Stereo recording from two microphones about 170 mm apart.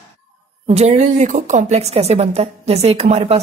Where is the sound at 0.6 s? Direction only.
40° right (ahead or behind).